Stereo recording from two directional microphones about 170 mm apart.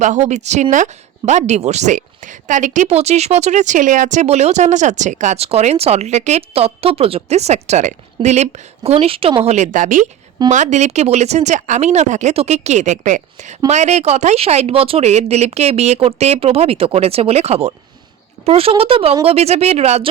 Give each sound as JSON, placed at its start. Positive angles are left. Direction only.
{"t": 0.3, "sound": "a woman's voice", "side_deg": -45}